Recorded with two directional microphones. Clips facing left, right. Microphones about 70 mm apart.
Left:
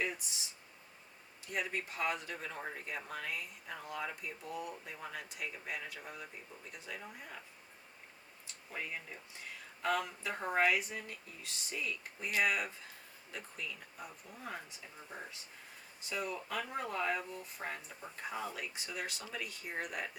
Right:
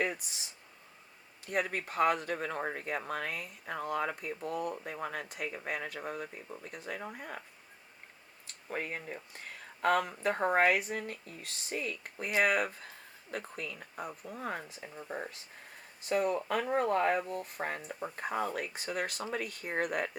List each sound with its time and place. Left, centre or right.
1.5 s speech: right
8.7 s speech: right